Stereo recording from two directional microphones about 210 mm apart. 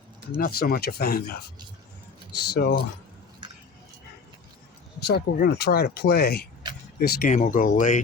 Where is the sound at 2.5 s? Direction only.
50° left (ahead or behind).